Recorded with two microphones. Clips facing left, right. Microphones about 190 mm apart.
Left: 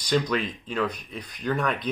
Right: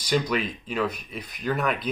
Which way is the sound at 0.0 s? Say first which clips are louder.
Even; 10° right (ahead or behind).